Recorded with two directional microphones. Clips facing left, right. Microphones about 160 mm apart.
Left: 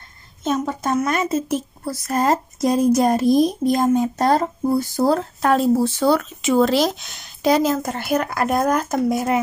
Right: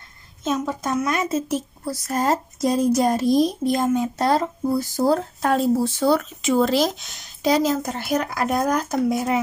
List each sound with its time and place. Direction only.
0.4 s speech: 55° left (ahead or behind)
4.9 s speech: 70° left (ahead or behind); by 9.4 s 50° left (ahead or behind)